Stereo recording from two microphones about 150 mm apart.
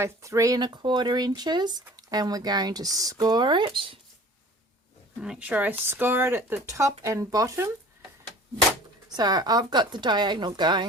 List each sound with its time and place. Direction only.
0.0 s speech: 20° right (ahead or behind)
5.2 s speech: 5° right (ahead or behind)
9.0 s speech: 25° right (ahead or behind)